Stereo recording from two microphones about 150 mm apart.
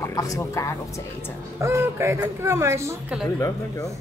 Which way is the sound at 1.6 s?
20° right (ahead or behind).